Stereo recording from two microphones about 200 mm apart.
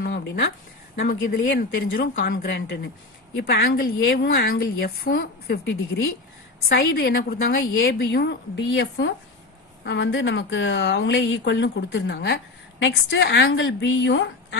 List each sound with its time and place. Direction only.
0.0 s a sound: 55° left (ahead or behind)
0.9 s a woman's voice: 50° left (ahead or behind)
7.8 s speech: 60° left (ahead or behind)